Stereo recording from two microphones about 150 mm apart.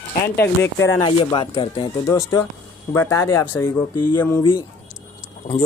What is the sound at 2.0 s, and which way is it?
Speech, 20° left (ahead or behind).